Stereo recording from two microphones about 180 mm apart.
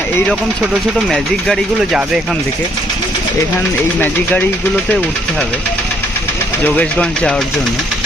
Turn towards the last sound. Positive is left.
turn(degrees=5)  # may be behind; listen again after turning